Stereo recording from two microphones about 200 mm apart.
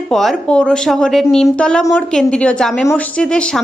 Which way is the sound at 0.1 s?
Centre (ahead or behind).